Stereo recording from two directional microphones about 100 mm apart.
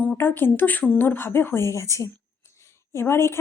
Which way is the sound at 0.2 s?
20° left (ahead or behind).